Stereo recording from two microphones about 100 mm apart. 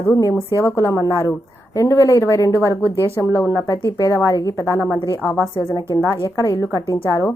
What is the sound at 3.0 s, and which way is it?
Speech, 30° right (ahead or behind).